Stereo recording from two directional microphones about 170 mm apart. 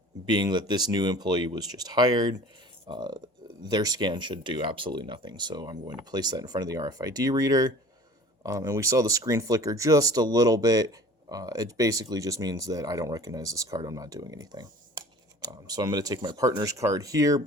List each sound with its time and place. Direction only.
0.3 s speech: 25° right (ahead or behind)